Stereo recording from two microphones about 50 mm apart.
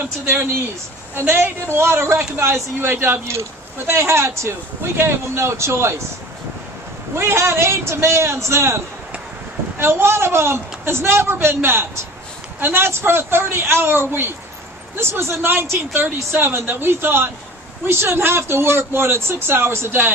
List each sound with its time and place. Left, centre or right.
1.1 s speech: right
3.3 s speech: right
7.2 s speech: right